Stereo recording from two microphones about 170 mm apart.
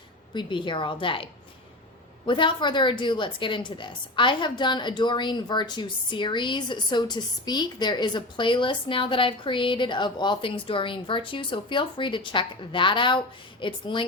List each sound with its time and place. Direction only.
0.3 s a woman's voice: 30° left (ahead or behind)